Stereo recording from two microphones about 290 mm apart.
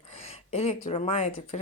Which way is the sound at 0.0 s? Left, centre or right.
Centre.